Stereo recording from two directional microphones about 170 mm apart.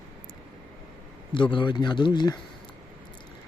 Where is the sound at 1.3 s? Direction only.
30° left (ahead or behind).